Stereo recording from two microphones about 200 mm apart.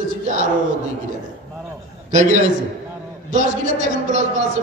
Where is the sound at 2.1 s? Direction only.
40° right (ahead or behind).